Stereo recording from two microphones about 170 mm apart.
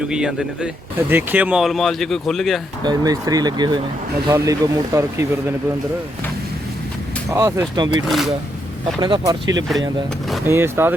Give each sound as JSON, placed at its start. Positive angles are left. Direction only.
{"t": 0.1, "sound": "speech", "side_deg": -5}
{"t": 2.8, "sound": "speech", "side_deg": -20}
{"t": 7.3, "sound": "speech", "side_deg": -20}
{"t": 8.0, "sound": "speech", "side_deg": 0}
{"t": 9.0, "sound": "speech", "side_deg": -25}